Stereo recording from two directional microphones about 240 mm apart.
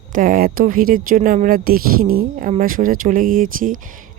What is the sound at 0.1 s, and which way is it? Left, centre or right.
Speech, right.